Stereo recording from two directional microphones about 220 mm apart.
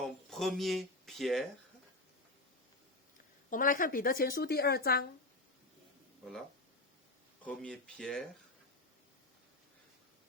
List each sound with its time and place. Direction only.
0.0 s speech: centre (ahead or behind)
3.5 s speech: 40° left (ahead or behind)
7.4 s speech: 5° left (ahead or behind)